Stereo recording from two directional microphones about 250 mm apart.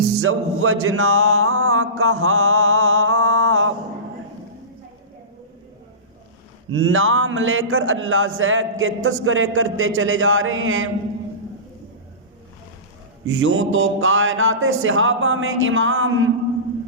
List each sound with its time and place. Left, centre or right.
0.2 s music: right
6.7 s speech: right
13.2 s speech: right